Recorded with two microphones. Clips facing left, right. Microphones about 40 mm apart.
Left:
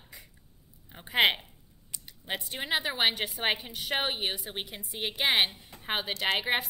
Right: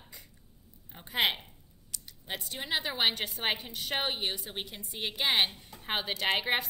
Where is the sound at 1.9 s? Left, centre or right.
Left.